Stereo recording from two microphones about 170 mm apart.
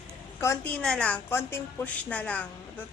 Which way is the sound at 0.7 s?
5° left (ahead or behind).